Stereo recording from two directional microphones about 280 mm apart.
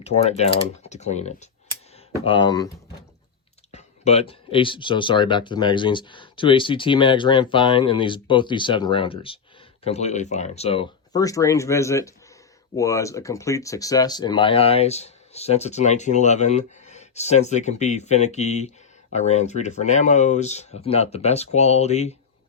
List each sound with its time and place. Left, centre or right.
0.0 s speech: left
3.7 s speech: left